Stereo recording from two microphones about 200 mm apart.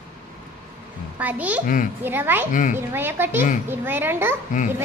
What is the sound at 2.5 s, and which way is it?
Speech, 40° left (ahead or behind).